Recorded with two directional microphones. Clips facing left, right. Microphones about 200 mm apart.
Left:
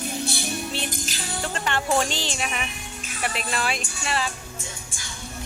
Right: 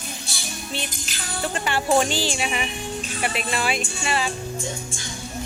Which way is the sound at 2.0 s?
5° right (ahead or behind).